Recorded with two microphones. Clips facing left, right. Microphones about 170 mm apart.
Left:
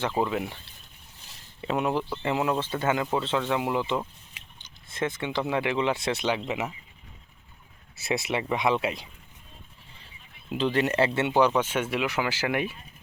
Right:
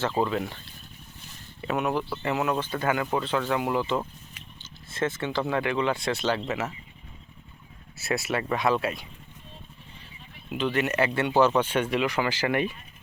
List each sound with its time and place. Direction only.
0.0 s speech: 15° left (ahead or behind)
1.6 s speech: 25° left (ahead or behind)
7.9 s speech: 15° left (ahead or behind)
10.6 s speech: 30° left (ahead or behind); by 12.7 s 10° left (ahead or behind)